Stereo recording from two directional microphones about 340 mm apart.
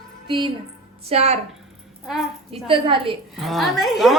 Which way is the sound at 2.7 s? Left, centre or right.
Centre.